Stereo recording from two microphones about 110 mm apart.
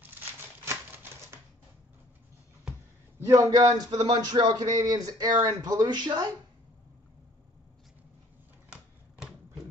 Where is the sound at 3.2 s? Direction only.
30° right (ahead or behind).